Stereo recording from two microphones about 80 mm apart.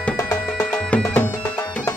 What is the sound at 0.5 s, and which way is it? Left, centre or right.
Music, centre.